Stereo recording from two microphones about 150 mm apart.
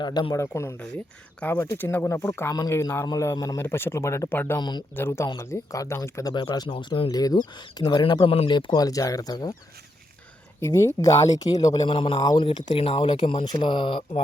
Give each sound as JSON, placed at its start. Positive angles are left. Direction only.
{"t": 0.0, "sound": "speech", "side_deg": 30}
{"t": 0.4, "sound": "speech", "side_deg": 15}
{"t": 10.6, "sound": "speech", "side_deg": 20}
{"t": 11.8, "sound": "speech", "side_deg": 35}